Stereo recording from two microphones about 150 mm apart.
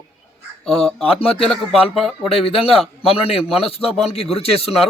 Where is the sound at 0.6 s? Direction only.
5° left (ahead or behind).